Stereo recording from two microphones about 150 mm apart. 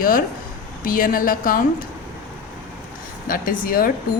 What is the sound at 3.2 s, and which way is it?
Speech, 70° left (ahead or behind).